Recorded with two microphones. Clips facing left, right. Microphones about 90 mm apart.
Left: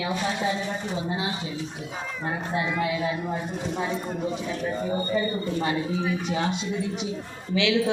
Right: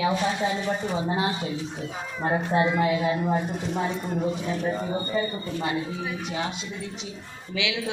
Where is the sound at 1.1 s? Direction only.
35° right (ahead or behind).